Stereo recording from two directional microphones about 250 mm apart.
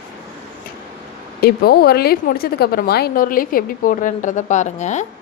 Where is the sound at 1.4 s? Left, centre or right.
Left.